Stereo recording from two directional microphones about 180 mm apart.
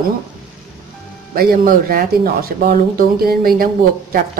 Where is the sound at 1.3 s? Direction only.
55° right (ahead or behind).